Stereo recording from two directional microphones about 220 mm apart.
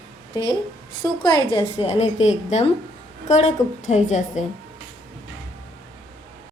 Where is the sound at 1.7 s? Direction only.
30° left (ahead or behind).